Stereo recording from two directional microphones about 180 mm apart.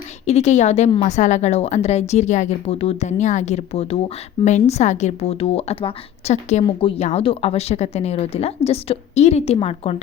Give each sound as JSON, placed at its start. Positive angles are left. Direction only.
{"t": 0.3, "sound": "speech", "side_deg": 40}